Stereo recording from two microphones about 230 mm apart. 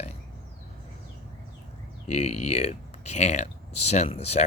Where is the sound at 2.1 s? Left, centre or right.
Left.